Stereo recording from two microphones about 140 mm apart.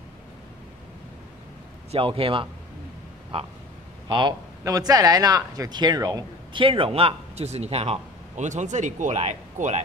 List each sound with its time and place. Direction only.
1.9 s a man's voice: 40° right (ahead or behind)
4.1 s speech: 35° right (ahead or behind)
6.6 s a man's voice: 40° right (ahead or behind); by 9.8 s 55° right (ahead or behind)